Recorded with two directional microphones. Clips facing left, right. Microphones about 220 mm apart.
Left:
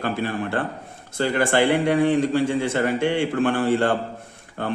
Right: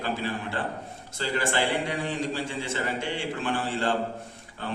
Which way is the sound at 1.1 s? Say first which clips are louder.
Left 8 dB; 55° left (ahead or behind).